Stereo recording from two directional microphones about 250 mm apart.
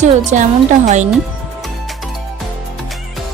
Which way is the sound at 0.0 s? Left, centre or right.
Right.